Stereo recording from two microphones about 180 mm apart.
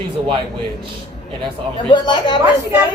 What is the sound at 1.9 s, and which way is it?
Speech, 25° left (ahead or behind).